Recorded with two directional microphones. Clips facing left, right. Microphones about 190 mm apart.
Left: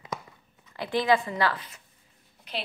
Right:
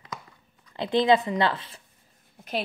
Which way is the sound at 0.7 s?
25° right (ahead or behind).